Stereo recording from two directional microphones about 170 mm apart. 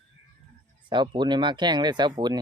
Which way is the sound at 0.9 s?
30° right (ahead or behind).